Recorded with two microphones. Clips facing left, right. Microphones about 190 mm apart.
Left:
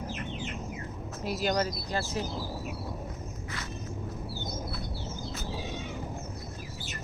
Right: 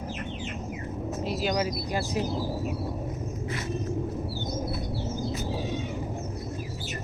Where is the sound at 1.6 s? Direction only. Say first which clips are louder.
Right 3 dB; 15° right (ahead or behind).